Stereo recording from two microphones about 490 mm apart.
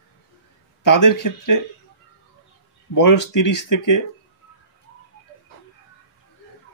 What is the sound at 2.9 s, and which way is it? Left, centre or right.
Speech, left.